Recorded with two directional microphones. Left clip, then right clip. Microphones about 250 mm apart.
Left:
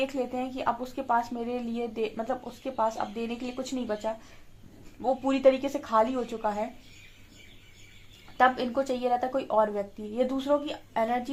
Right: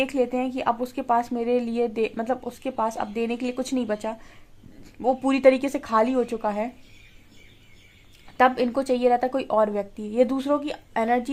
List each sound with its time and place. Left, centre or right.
0.0 s speech: right
8.4 s speech: right